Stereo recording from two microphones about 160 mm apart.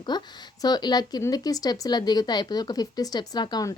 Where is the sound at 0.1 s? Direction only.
25° left (ahead or behind).